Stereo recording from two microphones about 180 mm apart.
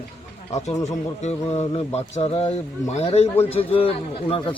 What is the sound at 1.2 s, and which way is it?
A man's voice, 35° left (ahead or behind).